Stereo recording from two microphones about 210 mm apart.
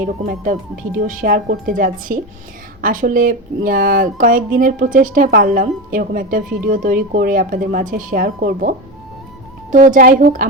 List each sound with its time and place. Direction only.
0.0 s speech: 40° right (ahead or behind)
9.7 s speech: 40° right (ahead or behind)